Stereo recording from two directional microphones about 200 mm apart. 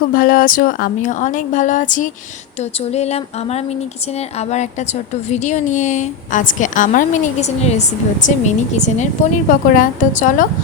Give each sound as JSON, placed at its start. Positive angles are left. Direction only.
{"t": 0.1, "sound": "a woman's voice", "side_deg": 45}